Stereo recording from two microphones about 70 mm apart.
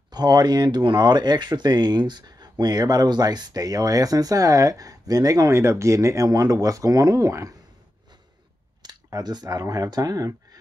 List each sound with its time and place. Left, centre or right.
0.1 s speech: right
2.6 s speech: right
8.8 s speech: right